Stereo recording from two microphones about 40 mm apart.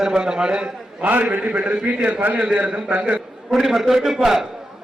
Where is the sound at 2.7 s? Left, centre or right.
Right.